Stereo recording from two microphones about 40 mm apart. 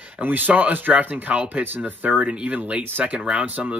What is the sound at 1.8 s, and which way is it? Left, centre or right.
Speech, right.